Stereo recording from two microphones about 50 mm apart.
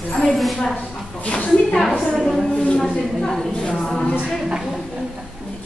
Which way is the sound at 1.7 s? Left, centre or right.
Centre.